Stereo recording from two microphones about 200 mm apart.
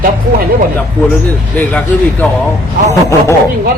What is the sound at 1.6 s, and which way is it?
Speech, 5° left (ahead or behind).